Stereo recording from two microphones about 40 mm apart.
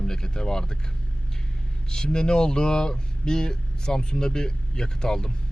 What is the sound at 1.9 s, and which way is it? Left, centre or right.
Speech, centre.